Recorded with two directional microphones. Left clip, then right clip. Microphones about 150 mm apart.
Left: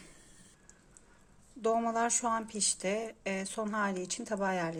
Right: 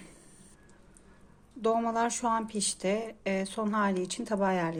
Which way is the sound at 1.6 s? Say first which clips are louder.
Right 2 dB; 5° left (ahead or behind).